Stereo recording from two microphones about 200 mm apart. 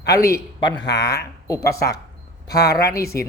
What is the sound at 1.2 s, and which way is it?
Speech, 15° left (ahead or behind).